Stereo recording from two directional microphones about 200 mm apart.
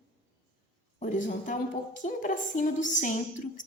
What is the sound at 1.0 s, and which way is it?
A woman's voice, 40° left (ahead or behind).